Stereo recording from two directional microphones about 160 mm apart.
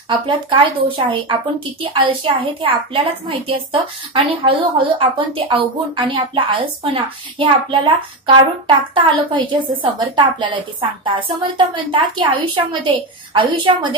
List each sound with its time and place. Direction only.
0.3 s a woman's voice: 30° right (ahead or behind)